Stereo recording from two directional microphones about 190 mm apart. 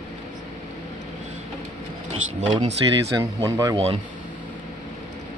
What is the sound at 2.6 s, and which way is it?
Speech, 20° right (ahead or behind).